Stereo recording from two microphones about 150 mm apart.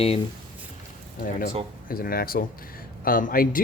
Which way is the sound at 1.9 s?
80° left.